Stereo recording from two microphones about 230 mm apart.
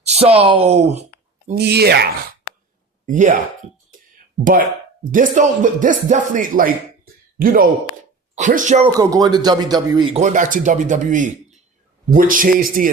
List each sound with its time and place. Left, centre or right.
0.0 s a sound: right
0.4 s speech: right
1.5 s speech: right
3.1 s speech: right
5.1 s speech: right
9.0 s speech: centre; by 12.9 s right